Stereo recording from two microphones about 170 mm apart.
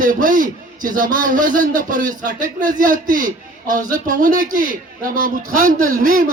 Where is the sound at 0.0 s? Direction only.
50° right (ahead or behind).